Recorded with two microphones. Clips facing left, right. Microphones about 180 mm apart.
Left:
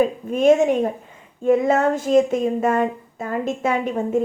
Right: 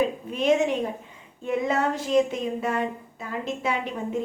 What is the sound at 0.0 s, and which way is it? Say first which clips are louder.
A woman's voice: left 7 dB; 45° left (ahead or behind).